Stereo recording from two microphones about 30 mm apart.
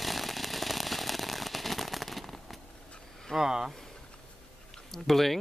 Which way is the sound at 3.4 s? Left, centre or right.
Centre.